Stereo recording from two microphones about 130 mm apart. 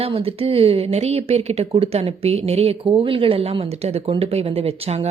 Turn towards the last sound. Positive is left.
turn(degrees=-50)  # may be behind; listen again after turning